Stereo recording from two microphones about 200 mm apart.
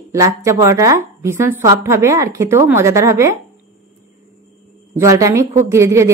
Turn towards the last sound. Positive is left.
turn(degrees=-15)  # may be behind; listen again after turning